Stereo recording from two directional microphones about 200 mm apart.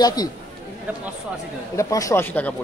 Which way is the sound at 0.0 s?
20° left (ahead or behind).